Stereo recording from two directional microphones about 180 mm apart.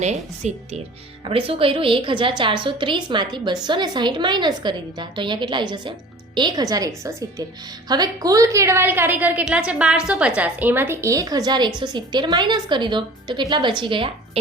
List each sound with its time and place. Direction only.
0.0 s a woman's voice: 40° right (ahead or behind)